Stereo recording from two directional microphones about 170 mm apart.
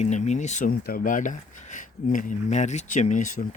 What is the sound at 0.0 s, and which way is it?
Speech, 45° left (ahead or behind).